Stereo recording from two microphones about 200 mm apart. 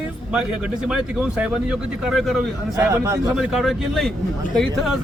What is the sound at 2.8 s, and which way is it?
Speech, 15° right (ahead or behind).